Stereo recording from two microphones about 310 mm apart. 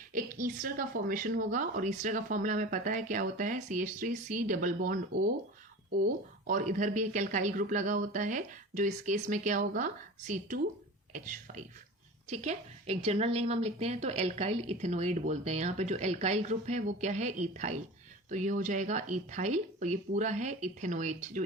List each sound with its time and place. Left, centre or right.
0.1 s a woman's voice: right